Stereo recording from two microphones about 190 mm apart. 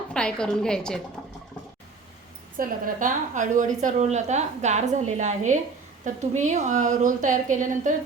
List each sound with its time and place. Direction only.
0.1 s a woman's voice: 5° left (ahead or behind)
2.6 s a woman's voice: 45° right (ahead or behind)